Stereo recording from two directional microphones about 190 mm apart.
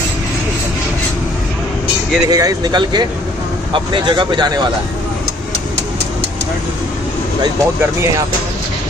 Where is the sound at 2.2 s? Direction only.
20° right (ahead or behind).